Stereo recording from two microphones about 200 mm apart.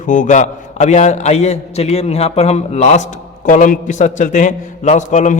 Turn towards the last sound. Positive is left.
turn(degrees=40)  # may be behind; listen again after turning